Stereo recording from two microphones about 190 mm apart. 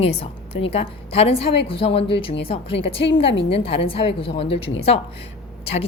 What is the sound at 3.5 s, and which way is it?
Speech, 30° left (ahead or behind).